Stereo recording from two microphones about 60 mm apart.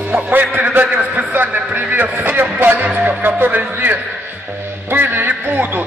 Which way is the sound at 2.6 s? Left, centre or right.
Right.